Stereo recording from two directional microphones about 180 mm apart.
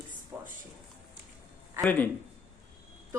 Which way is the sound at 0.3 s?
15° right (ahead or behind).